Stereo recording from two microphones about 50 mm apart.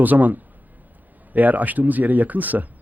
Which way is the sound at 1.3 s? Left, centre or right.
Right.